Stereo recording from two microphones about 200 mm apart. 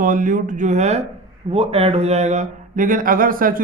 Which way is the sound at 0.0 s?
40° right (ahead or behind).